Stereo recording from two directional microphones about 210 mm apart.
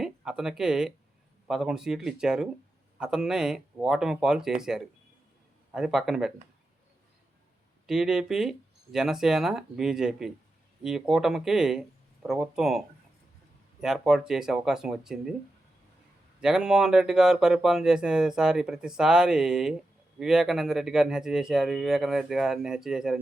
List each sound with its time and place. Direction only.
0.0 s speech: 5° right (ahead or behind)
7.9 s speech: 5° right (ahead or behind)
13.8 s speech: centre (ahead or behind)
16.4 s speech: 5° right (ahead or behind)